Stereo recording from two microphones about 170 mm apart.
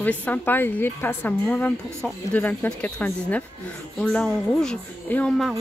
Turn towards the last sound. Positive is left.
turn(degrees=0)  # may be behind; listen again after turning